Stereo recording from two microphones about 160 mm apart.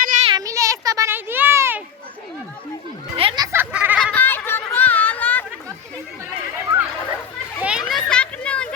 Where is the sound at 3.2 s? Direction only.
35° right (ahead or behind).